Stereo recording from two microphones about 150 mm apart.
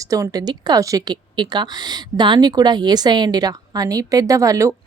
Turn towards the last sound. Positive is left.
turn(degrees=-20)  # may be behind; listen again after turning